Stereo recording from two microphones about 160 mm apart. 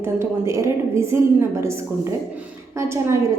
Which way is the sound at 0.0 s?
15° right (ahead or behind).